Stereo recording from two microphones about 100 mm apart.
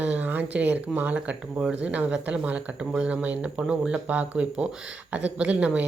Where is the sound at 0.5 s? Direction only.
15° right (ahead or behind).